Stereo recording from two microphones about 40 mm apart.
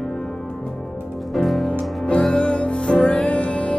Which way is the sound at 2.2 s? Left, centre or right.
Left.